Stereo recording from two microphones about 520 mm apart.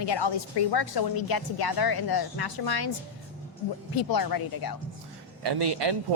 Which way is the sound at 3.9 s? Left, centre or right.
Left.